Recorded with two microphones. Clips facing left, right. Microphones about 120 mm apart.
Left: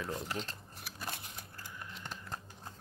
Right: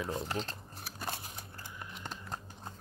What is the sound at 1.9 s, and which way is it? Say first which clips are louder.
Typing: right 2 dB; 20° right (ahead or behind).